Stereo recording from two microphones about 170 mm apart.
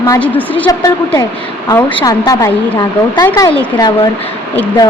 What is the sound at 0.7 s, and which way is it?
A woman's voice, 20° left (ahead or behind).